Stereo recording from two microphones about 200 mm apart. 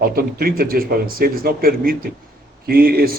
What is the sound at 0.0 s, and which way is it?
Speech, 50° right (ahead or behind).